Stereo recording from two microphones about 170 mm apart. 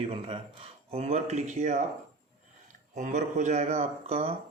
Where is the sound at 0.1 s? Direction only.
35° right (ahead or behind).